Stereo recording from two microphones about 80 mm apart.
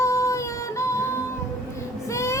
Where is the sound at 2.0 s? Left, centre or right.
Left.